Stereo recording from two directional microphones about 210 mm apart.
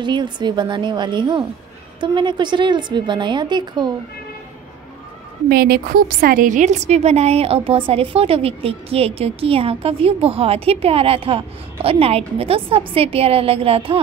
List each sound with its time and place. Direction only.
0.0 s a woman's voice: 20° right (ahead or behind)
5.5 s a woman's voice: 45° right (ahead or behind); by 13.9 s 25° right (ahead or behind)